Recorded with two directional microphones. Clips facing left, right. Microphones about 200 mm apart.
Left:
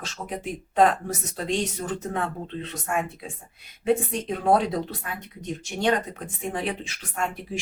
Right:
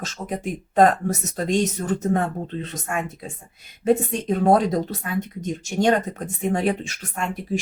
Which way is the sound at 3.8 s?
40° right (ahead or behind).